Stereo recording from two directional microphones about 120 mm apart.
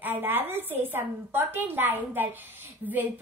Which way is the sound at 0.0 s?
15° right (ahead or behind).